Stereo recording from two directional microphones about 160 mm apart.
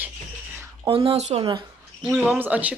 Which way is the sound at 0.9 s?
35° right (ahead or behind).